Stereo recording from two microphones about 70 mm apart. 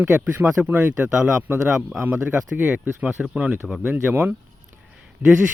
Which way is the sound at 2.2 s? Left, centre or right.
Right.